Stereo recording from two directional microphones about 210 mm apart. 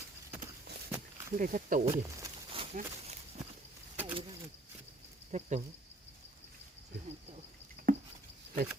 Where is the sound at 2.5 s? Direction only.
30° right (ahead or behind).